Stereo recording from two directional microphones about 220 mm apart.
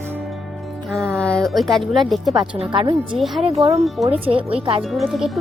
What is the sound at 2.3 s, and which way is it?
Speech, 20° right (ahead or behind).